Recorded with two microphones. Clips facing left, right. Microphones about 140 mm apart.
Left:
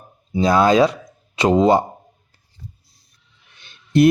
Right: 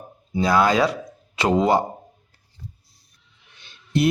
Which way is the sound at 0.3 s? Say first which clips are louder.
Left 4 dB; 25° left (ahead or behind).